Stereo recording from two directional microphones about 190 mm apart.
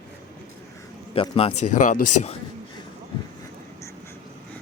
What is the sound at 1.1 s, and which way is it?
A man's voice, 30° left (ahead or behind).